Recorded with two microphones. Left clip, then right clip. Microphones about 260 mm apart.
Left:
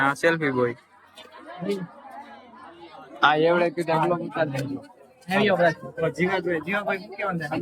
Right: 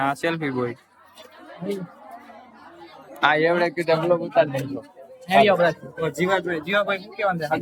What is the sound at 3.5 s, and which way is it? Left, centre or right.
A man's voice, centre.